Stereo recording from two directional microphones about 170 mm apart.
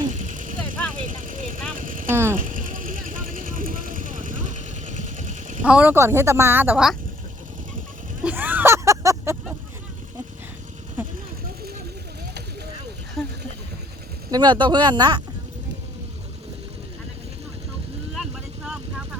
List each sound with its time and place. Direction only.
0.1 s vehicle: 45° right (ahead or behind)
2.0 s a woman's voice: 15° right (ahead or behind)
2.4 s vehicle: 50° right (ahead or behind)
5.6 s a woman's voice: 10° right (ahead or behind)
8.2 s a sound: 10° right (ahead or behind)
13.2 s a sound: centre (ahead or behind)
14.3 s speech: 25° right (ahead or behind)
18.1 s vehicle: 5° right (ahead or behind)